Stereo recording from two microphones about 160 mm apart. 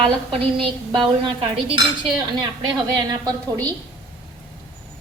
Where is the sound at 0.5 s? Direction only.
30° right (ahead or behind).